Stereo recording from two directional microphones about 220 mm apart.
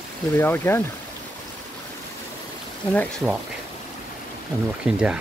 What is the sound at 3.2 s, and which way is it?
Speech, 5° right (ahead or behind).